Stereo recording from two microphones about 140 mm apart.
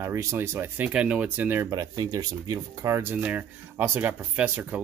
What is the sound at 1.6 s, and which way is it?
Speech, 25° right (ahead or behind).